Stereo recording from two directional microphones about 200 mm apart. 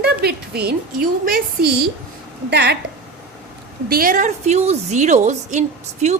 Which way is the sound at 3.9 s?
45° right (ahead or behind).